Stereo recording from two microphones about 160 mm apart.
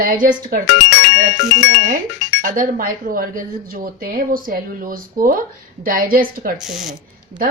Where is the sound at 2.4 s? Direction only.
60° right (ahead or behind).